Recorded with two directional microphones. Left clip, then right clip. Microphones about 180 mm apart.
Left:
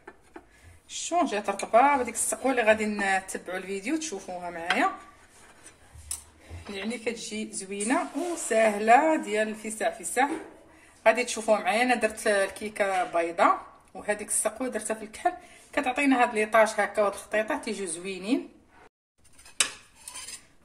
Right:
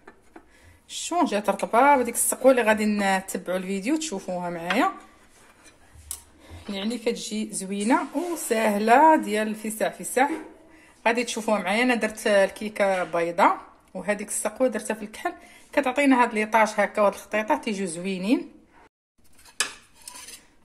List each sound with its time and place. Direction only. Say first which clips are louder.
0.8 s a woman's voice: right 2 dB; 50° right (ahead or behind)
6.7 s a woman's voice: right 5 dB; 60° right (ahead or behind); by 18.4 s 35° right (ahead or behind)